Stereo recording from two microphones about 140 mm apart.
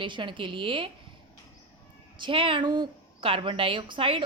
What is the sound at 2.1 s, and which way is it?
A woman's voice, 35° right (ahead or behind).